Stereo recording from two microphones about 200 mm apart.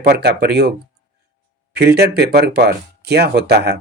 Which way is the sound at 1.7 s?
55° right (ahead or behind).